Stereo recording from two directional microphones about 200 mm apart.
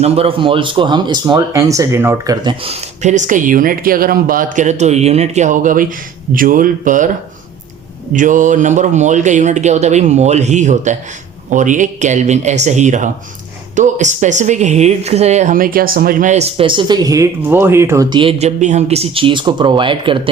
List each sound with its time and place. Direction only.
0.0 s speech: 30° right (ahead or behind)
3.0 s speech: 35° right (ahead or behind)
8.1 s speech: 40° right (ahead or behind)